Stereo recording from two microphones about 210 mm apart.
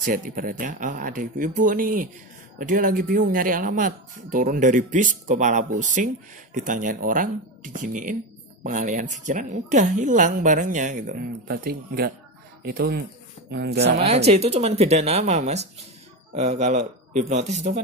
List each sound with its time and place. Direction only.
0.0 s speech: 40° right (ahead or behind)
14.0 s speech: 30° right (ahead or behind)